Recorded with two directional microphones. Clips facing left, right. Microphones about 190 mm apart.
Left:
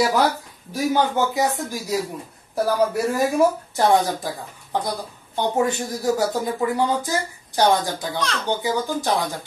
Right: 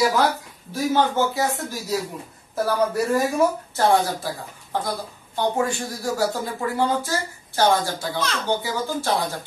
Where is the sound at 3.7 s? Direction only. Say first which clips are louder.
Left 1 dB; 20° left (ahead or behind).